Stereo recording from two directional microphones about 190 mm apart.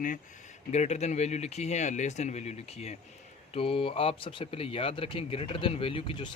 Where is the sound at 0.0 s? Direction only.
40° left (ahead or behind).